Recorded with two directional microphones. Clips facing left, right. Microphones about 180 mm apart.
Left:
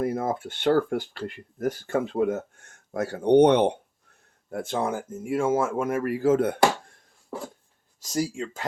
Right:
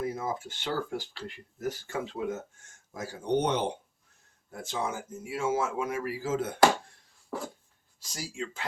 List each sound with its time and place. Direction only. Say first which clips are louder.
0.0 s speech: left 6 dB; 55° left (ahead or behind)
8.0 s speech: left 10 dB; 45° left (ahead or behind)